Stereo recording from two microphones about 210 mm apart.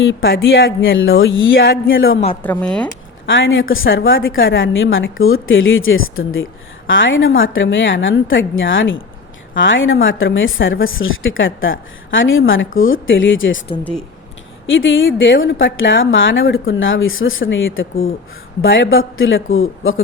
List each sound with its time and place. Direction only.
0.0 s a woman's voice: 60° left (ahead or behind)
2.4 s speech: 5° left (ahead or behind)
3.2 s a woman's voice: 65° left (ahead or behind)
14.7 s a woman's voice: 65° left (ahead or behind)